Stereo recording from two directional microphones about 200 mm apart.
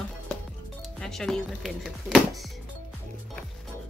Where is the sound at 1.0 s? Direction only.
Centre (ahead or behind).